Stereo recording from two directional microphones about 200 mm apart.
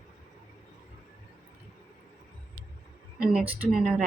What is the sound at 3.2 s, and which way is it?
Speech, 5° right (ahead or behind).